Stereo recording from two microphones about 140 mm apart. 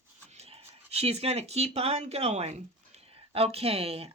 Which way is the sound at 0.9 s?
45° right (ahead or behind).